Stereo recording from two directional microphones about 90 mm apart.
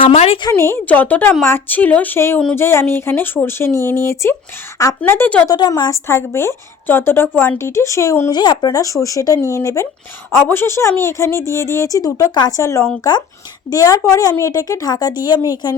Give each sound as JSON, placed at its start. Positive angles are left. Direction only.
{"t": 0.5, "sound": "a woman's voice", "side_deg": 30}
{"t": 0.9, "sound": "a woman's voice", "side_deg": 15}
{"t": 5.5, "sound": "a woman's voice", "side_deg": 50}
{"t": 5.9, "sound": "a woman's voice", "side_deg": 30}
{"t": 8.3, "sound": "a woman's voice", "side_deg": 50}
{"t": 10.4, "sound": "a woman's voice", "side_deg": 25}
{"t": 12.5, "sound": "a woman's voice", "side_deg": 35}